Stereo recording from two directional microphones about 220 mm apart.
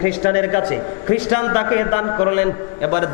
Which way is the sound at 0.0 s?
20° left (ahead or behind).